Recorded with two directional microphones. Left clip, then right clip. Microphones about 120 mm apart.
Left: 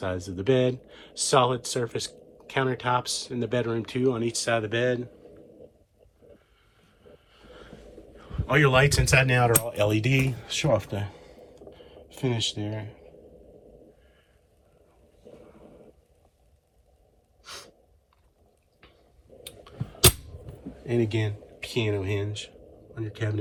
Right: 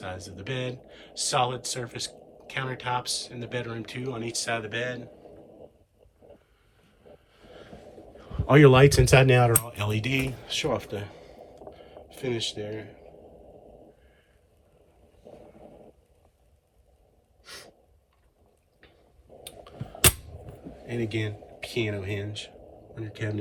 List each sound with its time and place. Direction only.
0.0 s speech: 10° left (ahead or behind)
7.0 s vehicle: 10° left (ahead or behind)
8.1 s speech: 20° right (ahead or behind)
9.6 s speech: centre (ahead or behind)
17.4 s gasp: 15° left (ahead or behind)
19.5 s a sound: 30° left (ahead or behind)
20.8 s speech: 15° left (ahead or behind)